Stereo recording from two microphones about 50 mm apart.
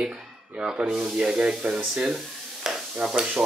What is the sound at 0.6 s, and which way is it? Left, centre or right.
Speech, centre.